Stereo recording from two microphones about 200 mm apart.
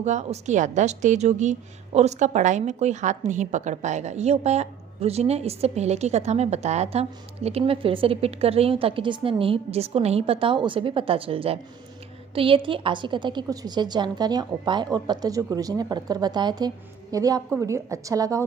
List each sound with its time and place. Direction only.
0.0 s a woman's voice: 35° right (ahead or behind); by 18.4 s 15° right (ahead or behind)